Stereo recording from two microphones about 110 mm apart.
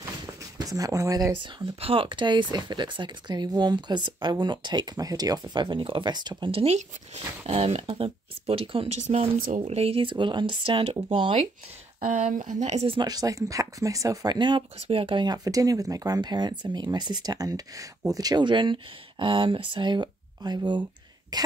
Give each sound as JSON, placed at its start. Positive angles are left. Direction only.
{"t": 0.6, "sound": "speech", "side_deg": -35}
{"t": 1.4, "sound": "speech", "side_deg": -55}
{"t": 6.5, "sound": "speech", "side_deg": -70}
{"t": 7.4, "sound": "speech", "side_deg": -65}
{"t": 12.4, "sound": "speech", "side_deg": -90}
{"t": 12.9, "sound": "speech", "side_deg": -35}
{"t": 14.8, "sound": "speech", "side_deg": -55}